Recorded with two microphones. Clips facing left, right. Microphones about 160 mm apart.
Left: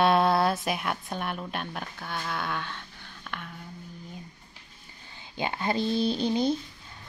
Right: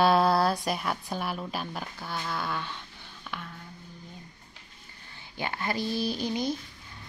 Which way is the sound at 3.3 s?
5° right (ahead or behind).